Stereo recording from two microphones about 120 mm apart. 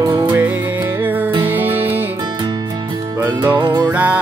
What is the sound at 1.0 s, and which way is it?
Music, 15° right (ahead or behind).